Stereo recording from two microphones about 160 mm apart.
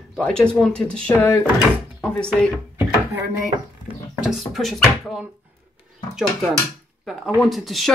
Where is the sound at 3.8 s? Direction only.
Centre (ahead or behind).